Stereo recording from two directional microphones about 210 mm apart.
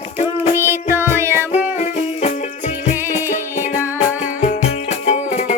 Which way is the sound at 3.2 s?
40° left (ahead or behind).